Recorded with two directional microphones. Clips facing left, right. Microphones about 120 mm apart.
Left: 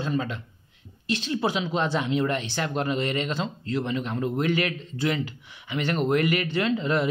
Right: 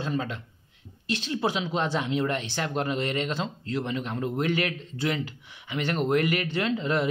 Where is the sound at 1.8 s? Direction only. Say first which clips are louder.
Left 2 dB; 25° right (ahead or behind); by 4.8 s 40° right (ahead or behind).